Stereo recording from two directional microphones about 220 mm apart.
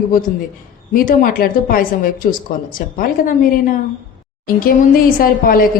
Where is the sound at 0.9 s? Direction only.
40° left (ahead or behind).